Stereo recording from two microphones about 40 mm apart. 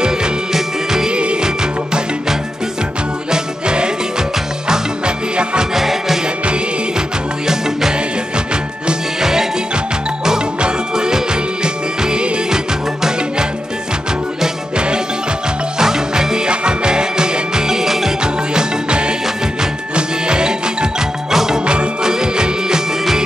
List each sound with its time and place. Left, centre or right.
0.0 s music: centre
1.1 s music: right
3.3 s music: right
5.8 s music: centre
9.2 s music: centre
15.8 s music: centre
21.3 s music: centre
21.6 s music: right